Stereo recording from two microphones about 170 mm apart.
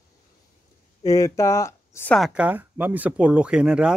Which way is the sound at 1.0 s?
20° left (ahead or behind).